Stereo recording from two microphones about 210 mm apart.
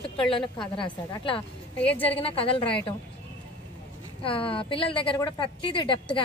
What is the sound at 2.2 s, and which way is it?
Speech, 25° left (ahead or behind).